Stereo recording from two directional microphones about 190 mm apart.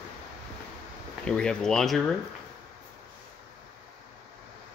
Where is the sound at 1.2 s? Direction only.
5° left (ahead or behind).